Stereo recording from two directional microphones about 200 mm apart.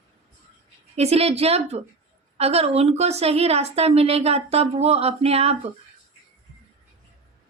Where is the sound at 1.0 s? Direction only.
30° right (ahead or behind).